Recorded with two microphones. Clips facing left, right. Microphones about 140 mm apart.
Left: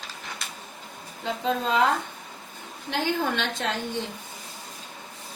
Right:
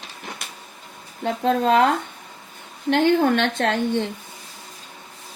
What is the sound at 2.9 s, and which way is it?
A woman's voice, 60° right (ahead or behind).